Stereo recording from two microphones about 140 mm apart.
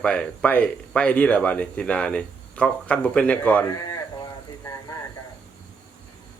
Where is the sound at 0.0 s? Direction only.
10° left (ahead or behind).